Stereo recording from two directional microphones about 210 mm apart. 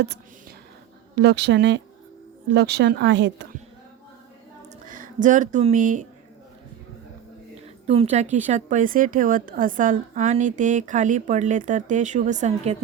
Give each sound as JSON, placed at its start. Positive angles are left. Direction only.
{"t": 1.1, "sound": "speech", "side_deg": -55}
{"t": 4.9, "sound": "speech", "side_deg": -40}
{"t": 7.9, "sound": "a woman's voice", "side_deg": -30}